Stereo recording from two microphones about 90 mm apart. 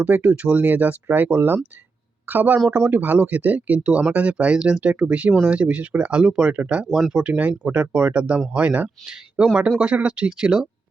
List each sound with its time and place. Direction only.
0.0 s speech: 15° right (ahead or behind)